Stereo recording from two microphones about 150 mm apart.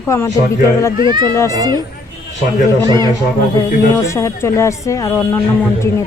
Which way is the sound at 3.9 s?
20° left (ahead or behind).